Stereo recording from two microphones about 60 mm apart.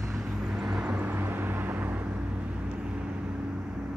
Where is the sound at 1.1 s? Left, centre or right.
Right.